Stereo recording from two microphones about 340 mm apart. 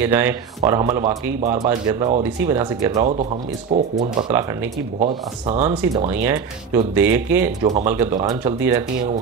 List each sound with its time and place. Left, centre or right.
0.0 s speech: centre
7.6 s speech: centre